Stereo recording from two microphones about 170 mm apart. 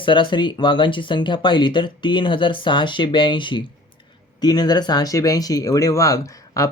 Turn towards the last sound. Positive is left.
turn(degrees=20)  # may be behind; listen again after turning